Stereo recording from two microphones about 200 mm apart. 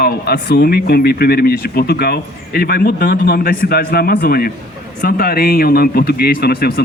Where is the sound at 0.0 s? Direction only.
50° left (ahead or behind).